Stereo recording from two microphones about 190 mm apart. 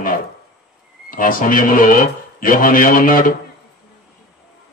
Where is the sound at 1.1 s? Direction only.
45° left (ahead or behind).